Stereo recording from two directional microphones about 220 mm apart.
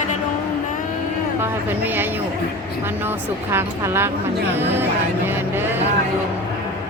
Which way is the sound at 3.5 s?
10° right (ahead or behind).